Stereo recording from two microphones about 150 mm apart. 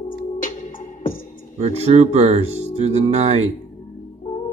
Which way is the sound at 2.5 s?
40° left (ahead or behind).